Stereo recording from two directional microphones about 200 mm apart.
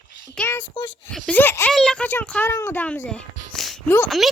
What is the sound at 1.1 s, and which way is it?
A child's voice, 5° left (ahead or behind).